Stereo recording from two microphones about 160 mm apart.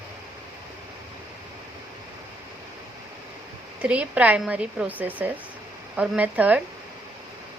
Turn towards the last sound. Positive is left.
turn(degrees=-10)  # may be behind; listen again after turning